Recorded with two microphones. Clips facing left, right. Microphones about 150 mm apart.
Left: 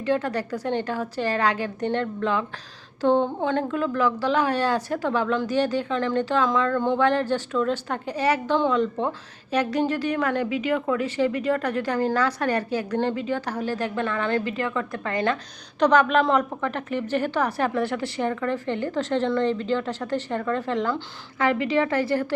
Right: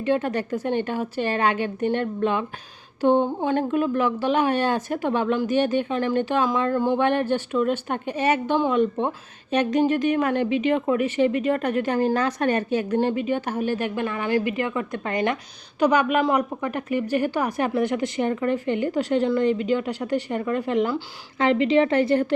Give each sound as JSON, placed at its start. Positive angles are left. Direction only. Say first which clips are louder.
{"t": 0.0, "sound": "a woman's voice", "louder": "right 1 dB", "side_deg": -20}
{"t": 6.7, "sound": "a woman's voice", "louder": "right 1 dB", "side_deg": -10}
{"t": 7.0, "sound": "a woman's voice", "louder": "even", "side_deg": -20}